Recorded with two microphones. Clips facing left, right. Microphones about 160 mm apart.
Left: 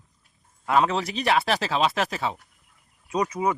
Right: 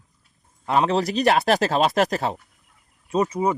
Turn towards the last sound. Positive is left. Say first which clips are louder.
# right 3 dB
turn(degrees=-30)  # may be behind; listen again after turning